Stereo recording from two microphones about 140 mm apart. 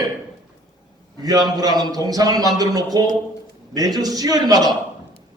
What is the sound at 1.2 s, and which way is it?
A man's voice, 25° right (ahead or behind).